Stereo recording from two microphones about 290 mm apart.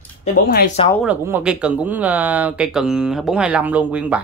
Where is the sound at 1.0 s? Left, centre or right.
Centre.